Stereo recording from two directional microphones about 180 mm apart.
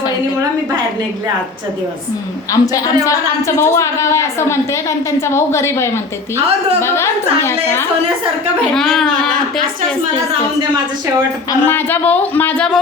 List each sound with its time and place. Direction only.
2.5 s a man's voice: 20° left (ahead or behind)
8.7 s speech: centre (ahead or behind)
11.6 s a man's voice: 10° left (ahead or behind)